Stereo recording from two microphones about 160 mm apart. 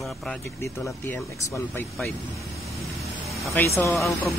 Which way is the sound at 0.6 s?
15° left (ahead or behind).